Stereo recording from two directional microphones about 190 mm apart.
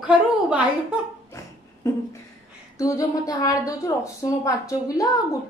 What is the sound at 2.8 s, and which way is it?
A woman's voice, 15° left (ahead or behind).